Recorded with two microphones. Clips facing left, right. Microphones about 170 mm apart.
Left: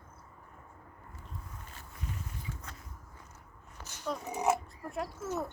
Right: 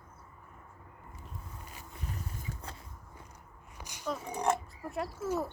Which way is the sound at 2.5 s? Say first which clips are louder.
Right 2 dB; 30° right (ahead or behind).